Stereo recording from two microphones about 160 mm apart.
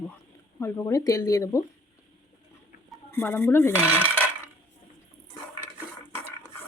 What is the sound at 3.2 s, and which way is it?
Speech, 15° left (ahead or behind).